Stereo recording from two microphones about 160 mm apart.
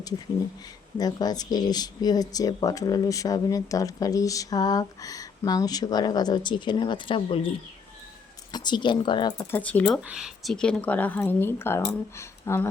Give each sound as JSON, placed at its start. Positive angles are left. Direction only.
{"t": 0.9, "sound": "speech", "side_deg": 25}
{"t": 8.5, "sound": "speech", "side_deg": 30}
{"t": 9.4, "sound": "speech", "side_deg": 10}
{"t": 10.0, "sound": "speech", "side_deg": -5}